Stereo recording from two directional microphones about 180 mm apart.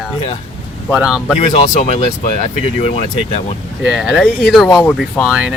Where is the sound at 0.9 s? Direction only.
5° right (ahead or behind).